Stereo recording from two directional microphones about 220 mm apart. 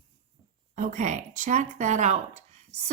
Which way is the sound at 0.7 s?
35° right (ahead or behind).